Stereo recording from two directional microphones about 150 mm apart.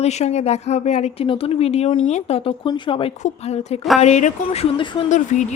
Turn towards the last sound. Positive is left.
turn(degrees=55)  # may be behind; listen again after turning